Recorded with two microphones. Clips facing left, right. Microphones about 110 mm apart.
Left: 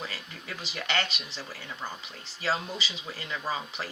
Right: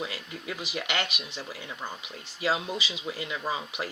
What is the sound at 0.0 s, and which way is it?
Speech, 15° right (ahead or behind).